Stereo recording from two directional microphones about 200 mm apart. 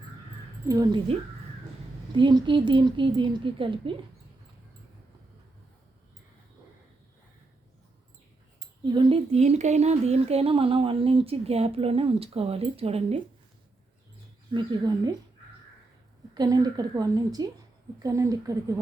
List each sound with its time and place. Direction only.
0.7 s speech: 20° right (ahead or behind)
8.8 s speech: 25° right (ahead or behind)
14.5 s speech: 20° right (ahead or behind)
16.3 s speech: 20° right (ahead or behind)